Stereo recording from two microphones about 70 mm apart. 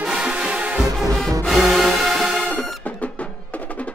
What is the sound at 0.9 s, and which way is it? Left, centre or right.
Music, centre.